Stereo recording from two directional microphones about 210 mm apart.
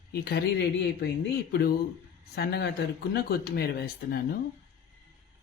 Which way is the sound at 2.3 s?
50° left (ahead or behind).